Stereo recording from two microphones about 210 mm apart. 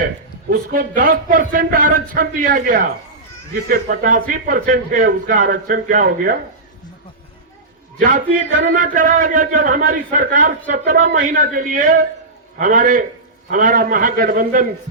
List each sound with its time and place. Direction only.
0.5 s a man's voice: 45° right (ahead or behind)
8.7 s a man's voice: 40° right (ahead or behind)